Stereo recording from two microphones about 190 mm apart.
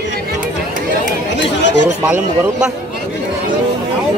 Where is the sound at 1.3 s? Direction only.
70° left (ahead or behind).